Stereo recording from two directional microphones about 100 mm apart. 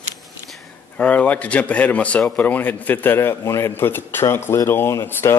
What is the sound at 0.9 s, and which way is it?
Speech, 15° left (ahead or behind).